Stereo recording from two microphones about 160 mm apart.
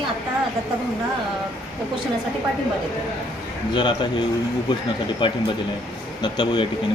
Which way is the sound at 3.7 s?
30° left (ahead or behind).